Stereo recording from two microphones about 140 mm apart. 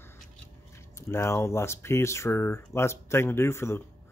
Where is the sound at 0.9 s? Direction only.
20° left (ahead or behind).